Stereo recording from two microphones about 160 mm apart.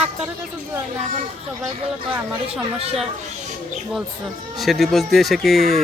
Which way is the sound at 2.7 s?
40° right (ahead or behind).